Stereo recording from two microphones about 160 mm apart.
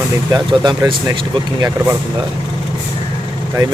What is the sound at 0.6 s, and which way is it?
Speech, 30° right (ahead or behind).